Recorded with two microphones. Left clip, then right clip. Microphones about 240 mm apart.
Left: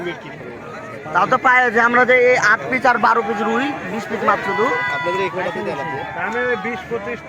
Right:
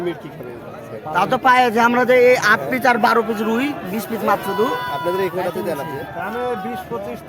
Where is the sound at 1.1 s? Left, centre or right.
Right.